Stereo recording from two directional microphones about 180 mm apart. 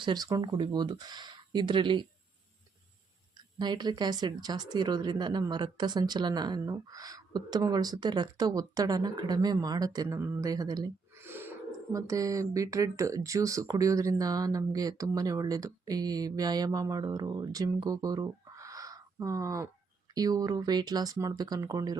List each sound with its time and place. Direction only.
0.0 s speech: 20° right (ahead or behind)
3.3 s speech: 25° right (ahead or behind)